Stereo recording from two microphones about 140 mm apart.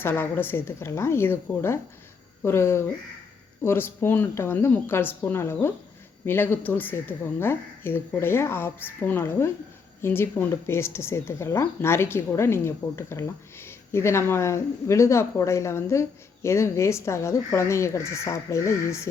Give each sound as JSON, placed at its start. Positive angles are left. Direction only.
{"t": 0.0, "sound": "a woman's voice", "side_deg": 15}